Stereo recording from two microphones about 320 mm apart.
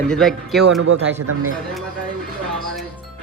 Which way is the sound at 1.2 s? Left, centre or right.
Right.